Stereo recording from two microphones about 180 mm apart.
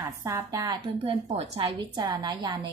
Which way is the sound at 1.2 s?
35° right (ahead or behind).